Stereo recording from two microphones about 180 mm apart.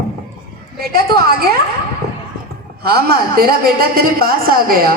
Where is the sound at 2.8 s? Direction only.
60° right (ahead or behind).